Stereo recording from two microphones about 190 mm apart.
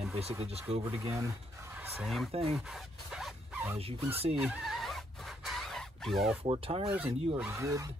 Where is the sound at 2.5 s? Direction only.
Centre (ahead or behind).